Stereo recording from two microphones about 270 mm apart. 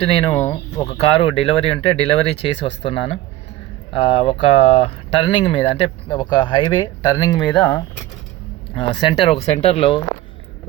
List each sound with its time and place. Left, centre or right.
0.0 s speech: left
7.5 s speech: centre
8.7 s speech: centre